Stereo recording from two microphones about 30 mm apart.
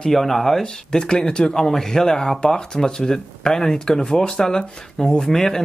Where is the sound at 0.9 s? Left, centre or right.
Left.